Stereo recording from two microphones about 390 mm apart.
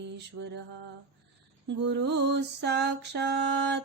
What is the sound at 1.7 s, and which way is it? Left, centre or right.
Mantra, right.